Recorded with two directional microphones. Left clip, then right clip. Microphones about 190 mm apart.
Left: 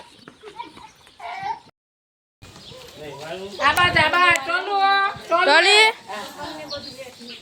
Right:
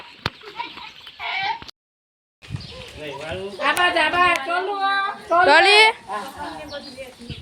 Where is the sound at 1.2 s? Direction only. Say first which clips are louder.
Right 4 dB; 20° left (ahead or behind).